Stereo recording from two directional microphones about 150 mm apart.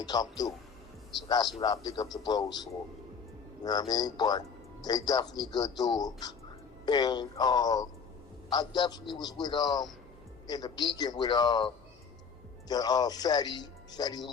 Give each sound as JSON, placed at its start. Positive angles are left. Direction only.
{"t": 0.0, "sound": "a man's voice", "side_deg": 25}
{"t": 1.6, "sound": "a man's voice", "side_deg": 25}